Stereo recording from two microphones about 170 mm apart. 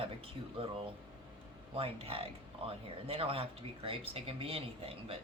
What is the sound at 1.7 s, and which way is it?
Speech, 35° right (ahead or behind).